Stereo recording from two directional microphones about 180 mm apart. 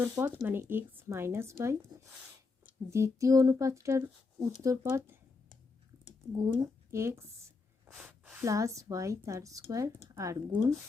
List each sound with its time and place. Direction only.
0.0 s speech: 10° right (ahead or behind)
6.3 s speech: 20° right (ahead or behind)